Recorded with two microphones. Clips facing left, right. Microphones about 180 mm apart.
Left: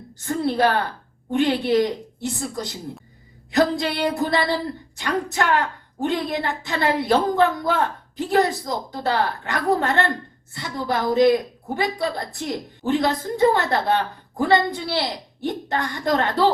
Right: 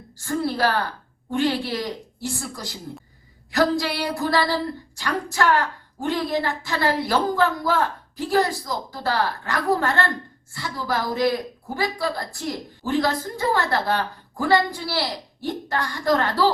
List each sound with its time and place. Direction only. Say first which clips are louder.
0.2 s a woman's voice: left 3 dB; 20° left (ahead or behind)